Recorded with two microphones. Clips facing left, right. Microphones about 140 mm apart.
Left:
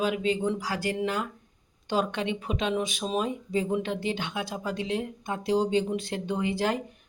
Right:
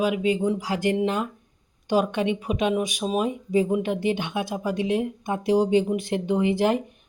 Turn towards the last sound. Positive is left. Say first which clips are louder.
# right 6 dB
turn(degrees=-20)  # may be behind; listen again after turning